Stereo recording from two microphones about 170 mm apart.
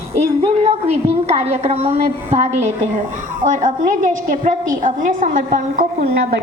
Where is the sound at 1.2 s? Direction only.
40° right (ahead or behind).